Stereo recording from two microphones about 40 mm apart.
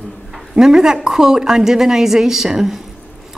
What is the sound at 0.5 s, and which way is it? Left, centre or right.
A woman's voice, centre.